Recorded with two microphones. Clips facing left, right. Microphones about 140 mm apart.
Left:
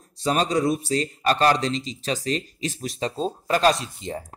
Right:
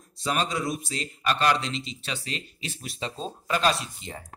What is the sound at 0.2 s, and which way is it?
Speech, 35° left (ahead or behind).